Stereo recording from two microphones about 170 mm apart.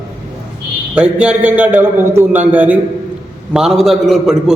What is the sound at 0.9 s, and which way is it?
A man's voice, 5° right (ahead or behind).